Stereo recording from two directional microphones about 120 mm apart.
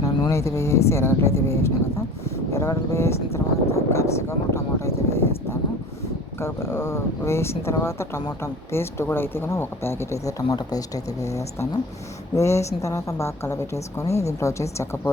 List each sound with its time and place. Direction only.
0.0 s speech: 25° left (ahead or behind)
6.4 s speech: 20° left (ahead or behind)